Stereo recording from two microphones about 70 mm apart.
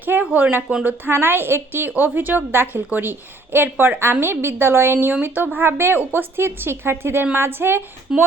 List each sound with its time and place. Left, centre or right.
0.0 s a sound: right
0.9 s a woman's voice: right
8.1 s speech: centre